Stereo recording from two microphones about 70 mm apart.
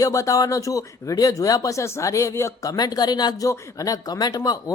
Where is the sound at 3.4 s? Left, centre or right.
Left.